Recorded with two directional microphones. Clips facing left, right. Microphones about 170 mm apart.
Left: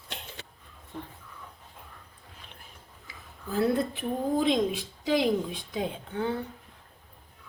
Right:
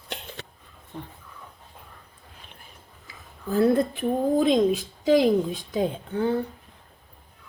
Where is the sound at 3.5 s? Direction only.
50° right (ahead or behind).